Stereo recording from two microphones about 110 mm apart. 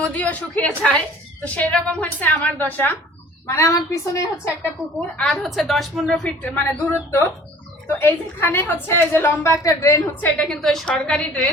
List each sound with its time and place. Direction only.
0.0 s speech: 15° left (ahead or behind)
3.4 s a woman's voice: 25° left (ahead or behind)
4.9 s a woman's voice: 5° left (ahead or behind)
6.2 s a woman's voice: 15° left (ahead or behind)
10.2 s speech: 10° left (ahead or behind)